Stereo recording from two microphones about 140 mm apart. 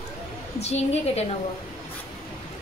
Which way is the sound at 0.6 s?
50° left (ahead or behind).